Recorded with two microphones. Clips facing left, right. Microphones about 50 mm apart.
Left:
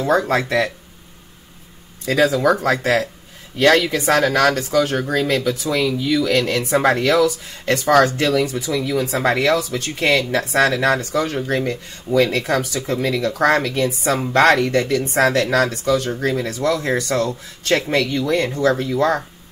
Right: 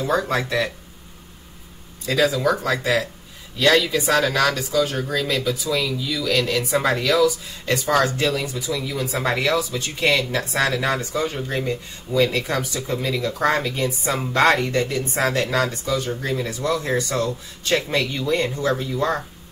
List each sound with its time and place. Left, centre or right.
0.0 s speech: left
2.2 s speech: left
18.0 s speech: left